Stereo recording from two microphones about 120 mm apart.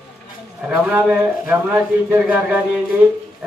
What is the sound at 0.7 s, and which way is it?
A man's voice, 15° right (ahead or behind).